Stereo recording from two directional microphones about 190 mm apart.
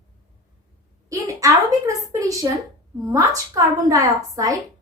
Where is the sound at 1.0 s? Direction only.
15° right (ahead or behind).